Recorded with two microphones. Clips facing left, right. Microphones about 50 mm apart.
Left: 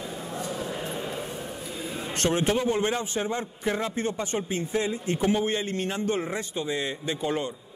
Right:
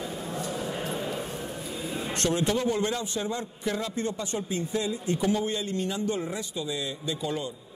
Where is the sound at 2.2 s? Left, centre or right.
Left.